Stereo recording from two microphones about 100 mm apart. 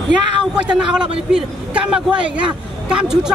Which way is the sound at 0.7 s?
10° right (ahead or behind).